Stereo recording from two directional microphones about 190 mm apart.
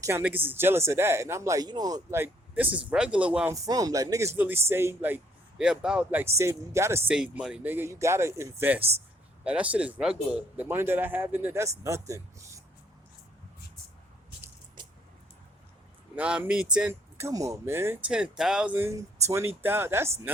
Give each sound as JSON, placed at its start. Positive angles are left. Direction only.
{"t": 0.0, "sound": "speech", "side_deg": -10}
{"t": 3.5, "sound": "speech", "side_deg": -20}
{"t": 16.1, "sound": "speech", "side_deg": -5}